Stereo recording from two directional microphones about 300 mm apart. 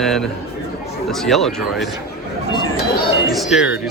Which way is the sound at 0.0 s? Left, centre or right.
Centre.